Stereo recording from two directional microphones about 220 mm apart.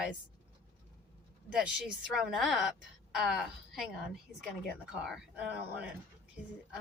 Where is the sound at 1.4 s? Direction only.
5° right (ahead or behind).